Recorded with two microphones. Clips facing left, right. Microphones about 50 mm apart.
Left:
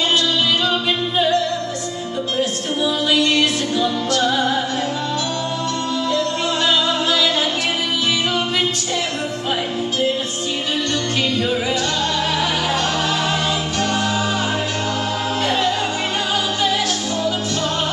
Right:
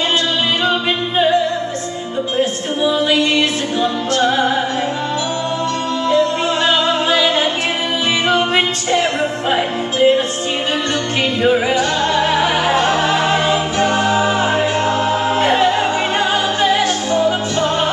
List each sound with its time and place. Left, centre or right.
0.7 s singing: right
2.3 s music: right
6.0 s music: right
8.3 s music: right
11.4 s music: right
15.4 s music: right